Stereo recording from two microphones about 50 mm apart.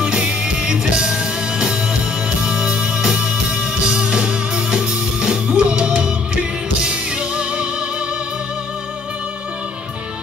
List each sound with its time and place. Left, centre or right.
0.0 s music: centre